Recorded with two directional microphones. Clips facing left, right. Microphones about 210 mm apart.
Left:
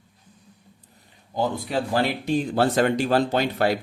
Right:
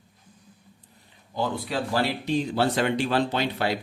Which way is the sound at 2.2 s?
50° left (ahead or behind).